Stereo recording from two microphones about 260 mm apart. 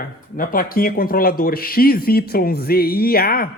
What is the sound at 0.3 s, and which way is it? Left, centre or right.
Speech, left.